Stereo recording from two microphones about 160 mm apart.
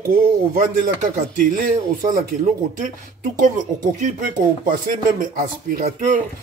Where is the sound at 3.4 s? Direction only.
50° right (ahead or behind).